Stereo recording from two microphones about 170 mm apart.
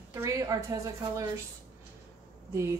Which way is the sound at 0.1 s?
20° right (ahead or behind).